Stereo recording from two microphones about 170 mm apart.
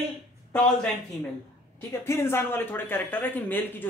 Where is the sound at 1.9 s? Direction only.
15° left (ahead or behind).